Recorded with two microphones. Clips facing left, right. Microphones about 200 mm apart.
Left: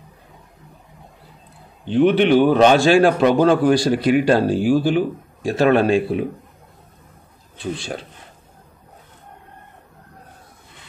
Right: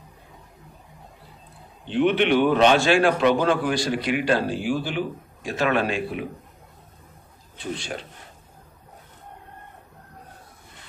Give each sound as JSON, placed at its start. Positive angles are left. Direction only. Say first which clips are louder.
{"t": 1.9, "sound": "a man's voice", "louder": "left 5 dB", "side_deg": 40}